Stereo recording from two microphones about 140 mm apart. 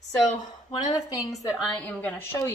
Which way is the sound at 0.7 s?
30° left (ahead or behind).